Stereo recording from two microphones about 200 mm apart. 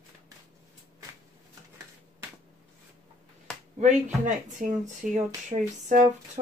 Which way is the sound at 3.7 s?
35° right (ahead or behind).